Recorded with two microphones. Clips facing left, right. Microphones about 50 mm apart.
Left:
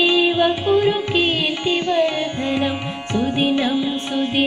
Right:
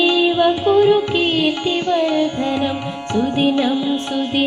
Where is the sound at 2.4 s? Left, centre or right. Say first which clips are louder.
Right 1 dB; centre.